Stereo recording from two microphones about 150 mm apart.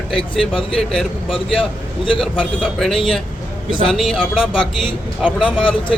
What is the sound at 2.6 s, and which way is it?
A man's voice, centre (ahead or behind).